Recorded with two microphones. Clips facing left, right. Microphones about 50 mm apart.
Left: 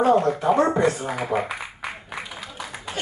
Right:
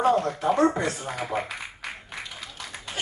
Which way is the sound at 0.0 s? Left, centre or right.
Left.